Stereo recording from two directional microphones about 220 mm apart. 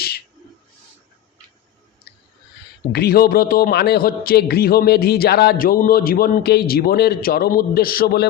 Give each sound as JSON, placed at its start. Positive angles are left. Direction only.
{"t": 2.9, "sound": "a man's voice", "side_deg": 45}